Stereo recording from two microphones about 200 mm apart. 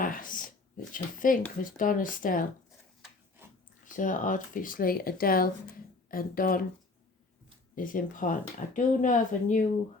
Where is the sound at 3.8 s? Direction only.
40° left (ahead or behind).